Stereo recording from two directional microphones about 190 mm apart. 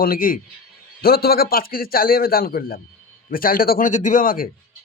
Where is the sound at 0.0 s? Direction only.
50° left (ahead or behind).